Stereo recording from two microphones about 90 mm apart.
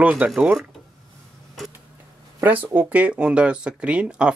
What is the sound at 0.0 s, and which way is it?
Speech, 20° right (ahead or behind).